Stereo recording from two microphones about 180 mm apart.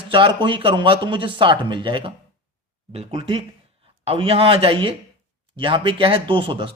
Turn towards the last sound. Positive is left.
turn(degrees=-30)  # may be behind; listen again after turning